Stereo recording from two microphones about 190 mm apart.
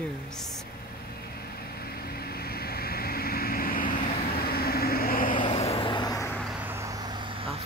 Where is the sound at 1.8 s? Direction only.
55° left (ahead or behind).